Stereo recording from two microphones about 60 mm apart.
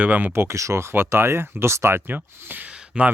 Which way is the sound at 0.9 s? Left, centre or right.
Right.